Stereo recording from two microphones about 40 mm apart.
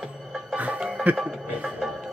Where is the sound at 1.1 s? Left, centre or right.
Right.